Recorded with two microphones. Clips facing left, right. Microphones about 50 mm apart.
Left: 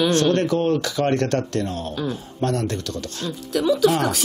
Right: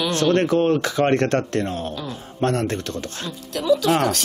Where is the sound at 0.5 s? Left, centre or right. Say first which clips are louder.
Right 2 dB; right.